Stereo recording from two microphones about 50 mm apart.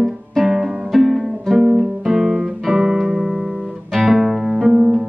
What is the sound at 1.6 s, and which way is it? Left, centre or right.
Guitar, centre.